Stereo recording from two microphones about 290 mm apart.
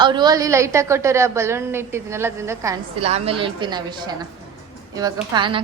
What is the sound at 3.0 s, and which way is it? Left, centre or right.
A woman's voice, right.